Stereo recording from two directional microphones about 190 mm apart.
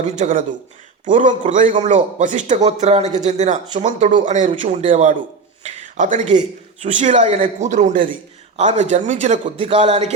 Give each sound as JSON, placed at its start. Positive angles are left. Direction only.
{"t": 0.0, "sound": "a man's voice", "side_deg": -40}